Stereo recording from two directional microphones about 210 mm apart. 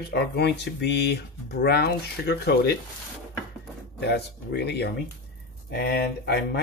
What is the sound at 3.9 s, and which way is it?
Speech, 50° left (ahead or behind).